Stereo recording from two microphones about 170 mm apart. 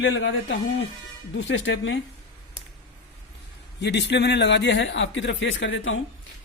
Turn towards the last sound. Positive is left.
turn(degrees=90)